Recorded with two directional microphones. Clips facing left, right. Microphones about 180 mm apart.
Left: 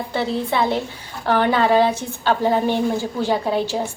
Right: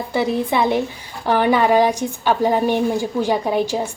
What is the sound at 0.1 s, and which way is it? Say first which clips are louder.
A woman's voice: right 3 dB; 15° right (ahead or behind).